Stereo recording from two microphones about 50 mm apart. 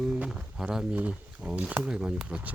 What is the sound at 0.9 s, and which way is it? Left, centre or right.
Speech, right.